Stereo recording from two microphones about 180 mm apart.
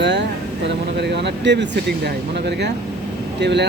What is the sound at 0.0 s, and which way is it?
Vehicle, 75° right (ahead or behind).